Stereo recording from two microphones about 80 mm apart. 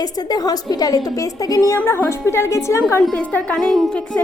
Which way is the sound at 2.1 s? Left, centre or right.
Left.